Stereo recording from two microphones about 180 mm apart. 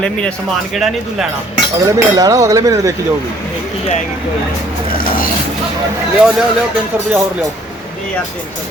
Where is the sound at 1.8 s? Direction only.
20° right (ahead or behind).